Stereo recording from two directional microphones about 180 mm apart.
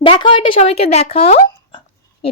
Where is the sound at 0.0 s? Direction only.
30° left (ahead or behind).